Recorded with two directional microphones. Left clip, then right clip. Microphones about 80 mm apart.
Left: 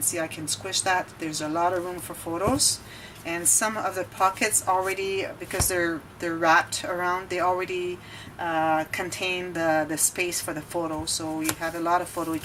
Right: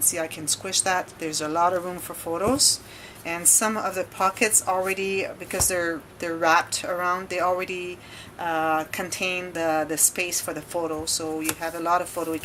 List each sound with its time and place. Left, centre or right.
0.1 s speech: right